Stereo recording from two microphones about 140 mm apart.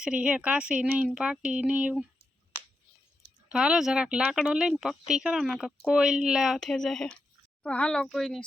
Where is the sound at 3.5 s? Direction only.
5° right (ahead or behind).